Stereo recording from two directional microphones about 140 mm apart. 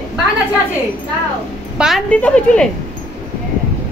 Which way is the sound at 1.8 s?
5° right (ahead or behind).